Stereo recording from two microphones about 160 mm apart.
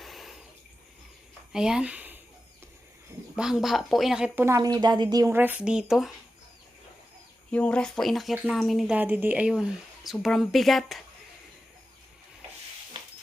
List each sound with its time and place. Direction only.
0.0 s a sound: centre (ahead or behind)
1.5 s speech: 5° right (ahead or behind)
3.3 s speech: 5° right (ahead or behind)
4.4 s speech: 20° right (ahead or behind); by 6.1 s centre (ahead or behind)
7.5 s speech: 5° left (ahead or behind)
9.0 s speech: 10° right (ahead or behind)